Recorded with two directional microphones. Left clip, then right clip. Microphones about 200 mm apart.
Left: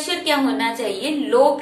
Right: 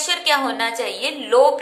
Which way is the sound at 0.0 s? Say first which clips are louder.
Right 1 dB; 30° right (ahead or behind).